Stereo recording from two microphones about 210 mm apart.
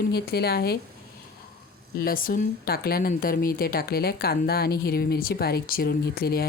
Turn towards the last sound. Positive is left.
turn(degrees=45)  # may be behind; listen again after turning